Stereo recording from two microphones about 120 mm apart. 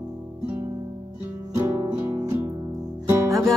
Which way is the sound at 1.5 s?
30° right (ahead or behind).